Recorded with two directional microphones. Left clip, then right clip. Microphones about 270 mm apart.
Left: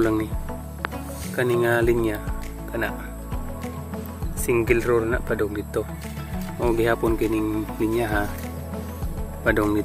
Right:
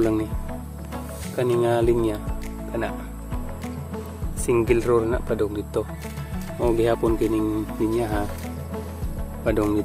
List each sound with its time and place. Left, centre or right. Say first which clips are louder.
0.0 s speech: even; centre
1.3 s speech: even; centre
4.5 s speech: right 1 dB; centre
6.6 s speech: right 1 dB; centre
9.4 s speech: left 1 dB; centre